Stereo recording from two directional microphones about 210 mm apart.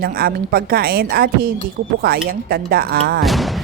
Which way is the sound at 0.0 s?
45° right (ahead or behind).